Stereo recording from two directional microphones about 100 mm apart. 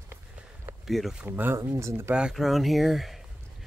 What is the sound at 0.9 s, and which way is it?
Speech, centre (ahead or behind).